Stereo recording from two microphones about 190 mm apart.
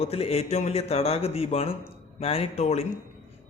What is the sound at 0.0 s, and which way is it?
A man's voice, 30° left (ahead or behind).